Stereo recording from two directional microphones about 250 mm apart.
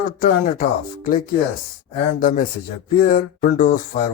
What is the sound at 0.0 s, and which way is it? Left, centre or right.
Speech, left.